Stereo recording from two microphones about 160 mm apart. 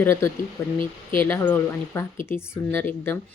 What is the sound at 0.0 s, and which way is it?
Speech, 15° left (ahead or behind).